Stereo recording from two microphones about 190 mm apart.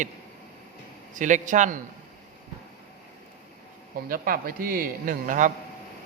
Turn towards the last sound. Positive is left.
turn(degrees=-45)  # may be behind; listen again after turning